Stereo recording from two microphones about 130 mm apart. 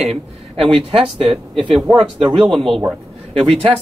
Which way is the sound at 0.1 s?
45° right (ahead or behind).